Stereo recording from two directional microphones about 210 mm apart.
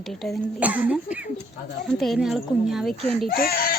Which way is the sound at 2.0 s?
Centre (ahead or behind).